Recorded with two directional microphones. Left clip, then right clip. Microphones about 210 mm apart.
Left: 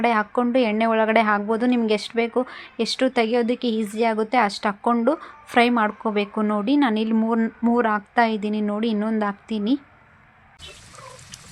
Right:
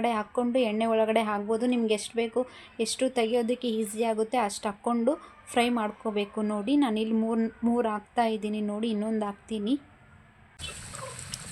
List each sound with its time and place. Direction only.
0.0 s a woman's voice: 15° left (ahead or behind)